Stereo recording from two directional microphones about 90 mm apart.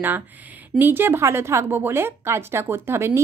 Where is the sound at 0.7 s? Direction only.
25° right (ahead or behind).